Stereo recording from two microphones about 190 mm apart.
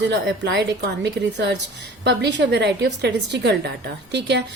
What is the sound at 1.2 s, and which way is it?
A woman's voice, 60° right (ahead or behind).